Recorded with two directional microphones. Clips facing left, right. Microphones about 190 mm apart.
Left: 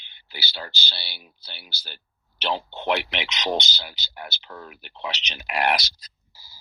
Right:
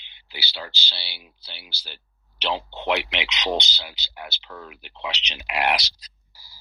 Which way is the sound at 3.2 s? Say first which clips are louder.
Even; 45° left (ahead or behind).